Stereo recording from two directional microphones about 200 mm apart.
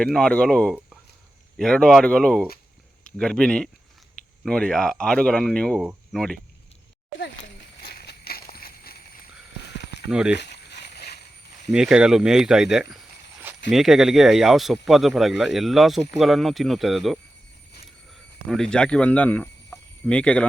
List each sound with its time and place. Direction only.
0.0 s speech: 5° left (ahead or behind)
7.2 s a sound: 55° left (ahead or behind)
10.1 s speech: 5° right (ahead or behind)
10.3 s a sound: 55° left (ahead or behind)
11.7 s speech: 5° right (ahead or behind)
18.4 s speech: centre (ahead or behind)